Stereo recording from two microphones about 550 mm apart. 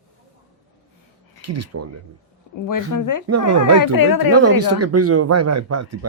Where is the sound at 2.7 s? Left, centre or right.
Left.